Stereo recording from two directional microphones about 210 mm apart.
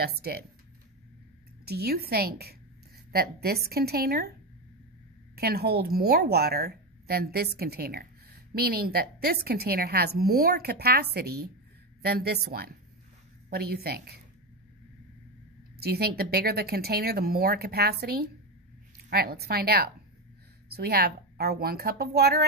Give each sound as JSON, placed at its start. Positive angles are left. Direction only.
{"t": 0.0, "sound": "a woman's voice", "side_deg": -50}
{"t": 1.7, "sound": "a woman's voice", "side_deg": -50}
{"t": 5.3, "sound": "a woman's voice", "side_deg": -50}
{"t": 15.8, "sound": "a woman's voice", "side_deg": -50}